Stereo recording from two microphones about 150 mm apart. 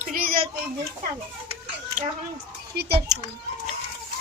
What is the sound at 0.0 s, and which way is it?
Children playing, 70° right (ahead or behind).